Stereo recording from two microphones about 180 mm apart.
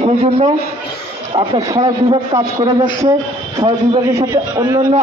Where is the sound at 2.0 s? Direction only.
20° right (ahead or behind).